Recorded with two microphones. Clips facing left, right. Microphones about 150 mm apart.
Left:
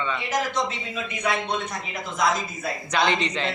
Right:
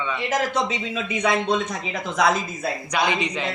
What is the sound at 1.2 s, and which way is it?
Speech, 90° right.